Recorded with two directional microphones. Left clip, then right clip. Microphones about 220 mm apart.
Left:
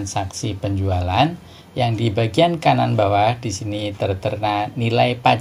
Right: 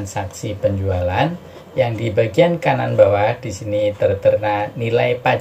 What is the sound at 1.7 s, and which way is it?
Speech, 35° left (ahead or behind).